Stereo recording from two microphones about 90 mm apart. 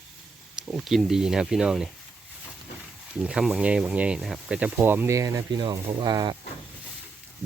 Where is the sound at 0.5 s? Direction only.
5° right (ahead or behind).